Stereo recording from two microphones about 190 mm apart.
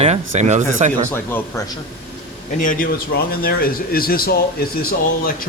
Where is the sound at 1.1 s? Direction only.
10° left (ahead or behind).